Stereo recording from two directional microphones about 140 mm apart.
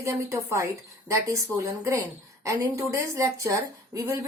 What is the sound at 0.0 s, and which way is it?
Speech, 20° right (ahead or behind).